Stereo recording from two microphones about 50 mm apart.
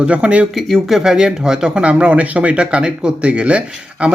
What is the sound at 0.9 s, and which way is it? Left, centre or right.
Speech, centre.